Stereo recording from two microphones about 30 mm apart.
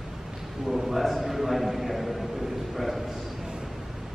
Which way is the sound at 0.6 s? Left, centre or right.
Centre.